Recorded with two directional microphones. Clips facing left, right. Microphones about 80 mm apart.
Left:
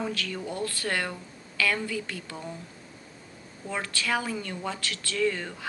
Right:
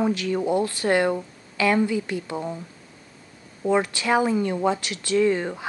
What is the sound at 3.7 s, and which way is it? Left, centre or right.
Speech, right.